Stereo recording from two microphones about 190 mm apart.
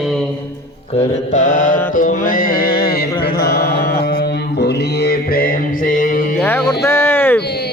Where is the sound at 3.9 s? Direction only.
55° left (ahead or behind).